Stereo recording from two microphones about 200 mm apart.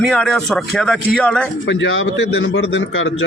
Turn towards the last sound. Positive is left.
turn(degrees=70)  # may be behind; listen again after turning